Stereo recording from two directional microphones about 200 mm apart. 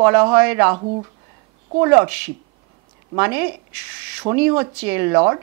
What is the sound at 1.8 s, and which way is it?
Speech, 15° right (ahead or behind).